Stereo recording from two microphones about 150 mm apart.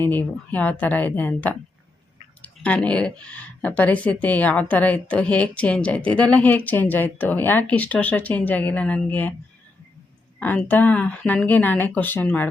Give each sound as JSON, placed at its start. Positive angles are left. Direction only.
{"t": 0.0, "sound": "speech", "side_deg": 10}
{"t": 10.4, "sound": "speech", "side_deg": 10}